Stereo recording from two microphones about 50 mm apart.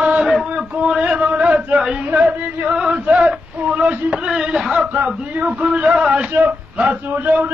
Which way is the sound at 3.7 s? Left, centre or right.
Right.